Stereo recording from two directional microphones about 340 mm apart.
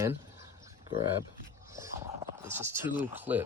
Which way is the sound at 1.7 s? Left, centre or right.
Centre.